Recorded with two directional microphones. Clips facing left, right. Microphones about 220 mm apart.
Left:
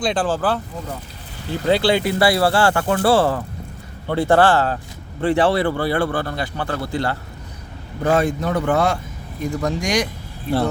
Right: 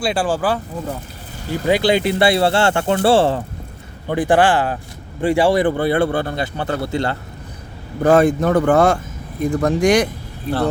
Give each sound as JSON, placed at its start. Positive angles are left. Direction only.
{"t": 0.0, "sound": "speech", "side_deg": -10}
{"t": 1.6, "sound": "speech", "side_deg": -15}
{"t": 4.1, "sound": "speech", "side_deg": -15}
{"t": 8.0, "sound": "speech", "side_deg": -55}